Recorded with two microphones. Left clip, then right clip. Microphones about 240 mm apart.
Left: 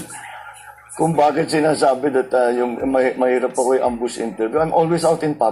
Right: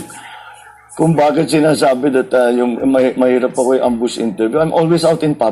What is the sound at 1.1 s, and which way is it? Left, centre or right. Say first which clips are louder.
A man's voice: right 3 dB; right.